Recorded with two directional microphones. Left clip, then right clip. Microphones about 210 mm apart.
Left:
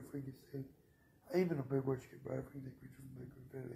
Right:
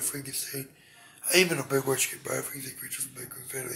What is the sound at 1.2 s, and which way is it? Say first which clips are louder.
Speech: right 13 dB; 15° right (ahead or behind).